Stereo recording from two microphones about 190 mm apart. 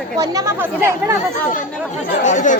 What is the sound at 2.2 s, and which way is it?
Speech, 40° left (ahead or behind).